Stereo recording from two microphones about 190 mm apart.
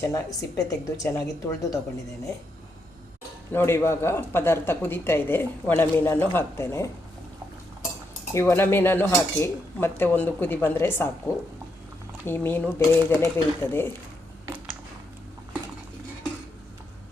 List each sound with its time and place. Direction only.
0.1 s speech: 20° left (ahead or behind)
3.5 s speech: 10° left (ahead or behind)
8.3 s speech: 15° left (ahead or behind)
12.2 s speech: 10° left (ahead or behind)